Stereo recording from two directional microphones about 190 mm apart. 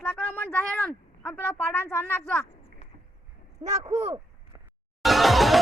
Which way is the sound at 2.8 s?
35° left (ahead or behind).